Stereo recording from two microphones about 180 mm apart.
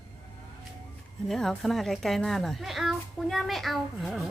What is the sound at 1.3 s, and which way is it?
A woman's voice, centre (ahead or behind).